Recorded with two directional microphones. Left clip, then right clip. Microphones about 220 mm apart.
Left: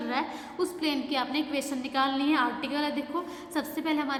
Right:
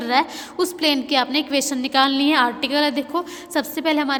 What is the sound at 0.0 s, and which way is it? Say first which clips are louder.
A woman's voice: right 11 dB; 45° right (ahead or behind).